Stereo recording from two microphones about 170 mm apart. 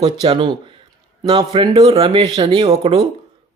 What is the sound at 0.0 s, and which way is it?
Speech, 30° right (ahead or behind).